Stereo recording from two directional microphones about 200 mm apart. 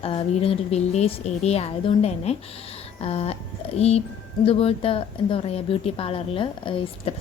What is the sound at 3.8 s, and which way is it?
A woman's voice, 30° left (ahead or behind).